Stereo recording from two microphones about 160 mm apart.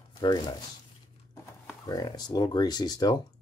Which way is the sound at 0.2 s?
25° left (ahead or behind).